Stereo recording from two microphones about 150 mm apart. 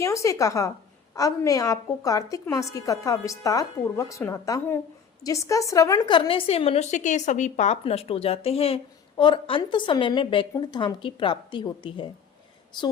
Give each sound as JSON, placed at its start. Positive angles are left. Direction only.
{"t": 0.0, "sound": "a woman's voice", "side_deg": 20}